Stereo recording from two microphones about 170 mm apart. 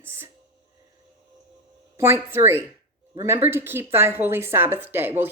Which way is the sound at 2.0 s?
15° right (ahead or behind).